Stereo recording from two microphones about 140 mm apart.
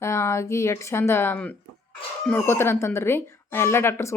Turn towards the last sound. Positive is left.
turn(degrees=20)  # may be behind; listen again after turning